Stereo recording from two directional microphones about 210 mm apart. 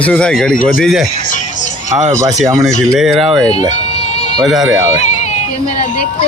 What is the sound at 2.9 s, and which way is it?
Speech, centre (ahead or behind).